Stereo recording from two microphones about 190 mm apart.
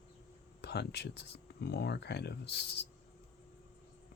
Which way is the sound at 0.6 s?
60° left (ahead or behind).